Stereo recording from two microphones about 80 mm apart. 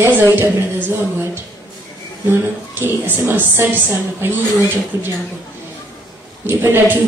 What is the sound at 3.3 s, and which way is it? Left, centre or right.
Speech, right.